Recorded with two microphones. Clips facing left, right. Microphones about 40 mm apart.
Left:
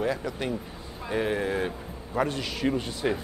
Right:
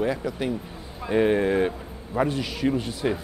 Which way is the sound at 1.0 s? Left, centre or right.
Centre.